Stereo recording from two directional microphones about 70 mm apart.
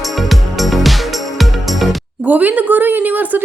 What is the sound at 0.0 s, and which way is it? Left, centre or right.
Music, centre.